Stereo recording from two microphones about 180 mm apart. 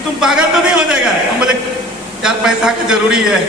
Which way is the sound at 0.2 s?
5° right (ahead or behind).